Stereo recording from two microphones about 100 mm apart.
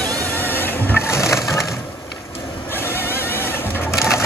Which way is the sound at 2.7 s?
20° left (ahead or behind).